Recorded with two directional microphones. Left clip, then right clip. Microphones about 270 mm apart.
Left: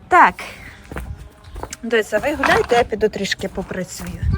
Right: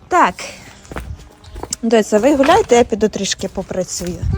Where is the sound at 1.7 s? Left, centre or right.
Centre.